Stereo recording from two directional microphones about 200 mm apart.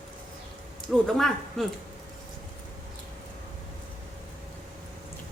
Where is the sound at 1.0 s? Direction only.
Centre (ahead or behind).